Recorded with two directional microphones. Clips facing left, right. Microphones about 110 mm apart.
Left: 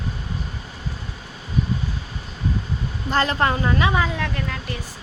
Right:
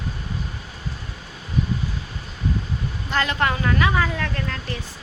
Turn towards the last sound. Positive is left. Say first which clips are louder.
# left 1 dB
turn(degrees=15)  # may be behind; listen again after turning